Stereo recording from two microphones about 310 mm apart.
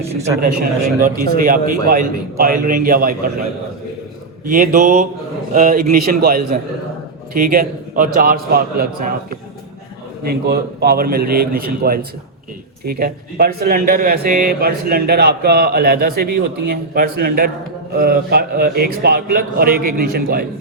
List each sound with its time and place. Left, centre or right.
0.4 s speech: right
4.4 s speech: right